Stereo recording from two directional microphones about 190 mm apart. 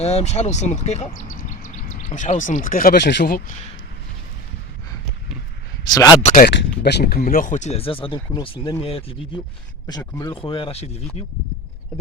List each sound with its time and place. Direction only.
0.0 s speech: 35° left (ahead or behind); by 3.3 s 65° left (ahead or behind)
5.8 s speech: 20° left (ahead or behind)
6.2 s speech: 40° left (ahead or behind)
6.5 s speech: 65° left (ahead or behind); by 9.4 s 30° left (ahead or behind)
9.8 s speech: 20° left (ahead or behind)
10.3 s speech: 30° left (ahead or behind)